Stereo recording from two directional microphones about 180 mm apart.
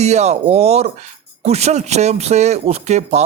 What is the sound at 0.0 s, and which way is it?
A man's voice, 40° right (ahead or behind).